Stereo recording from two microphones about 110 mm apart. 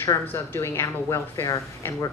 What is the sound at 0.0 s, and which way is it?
A woman's voice, 25° left (ahead or behind).